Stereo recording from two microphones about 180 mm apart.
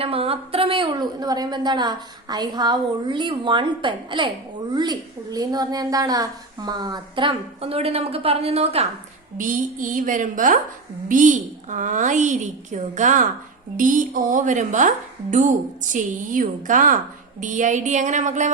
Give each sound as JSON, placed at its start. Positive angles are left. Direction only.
{"t": 0.0, "sound": "a woman's voice", "side_deg": -30}
{"t": 9.4, "sound": "a woman's voice", "side_deg": -45}